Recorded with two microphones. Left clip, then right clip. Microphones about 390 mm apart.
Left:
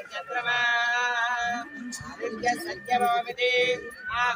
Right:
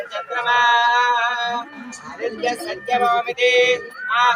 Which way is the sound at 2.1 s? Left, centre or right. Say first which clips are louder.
Right 5 dB; left.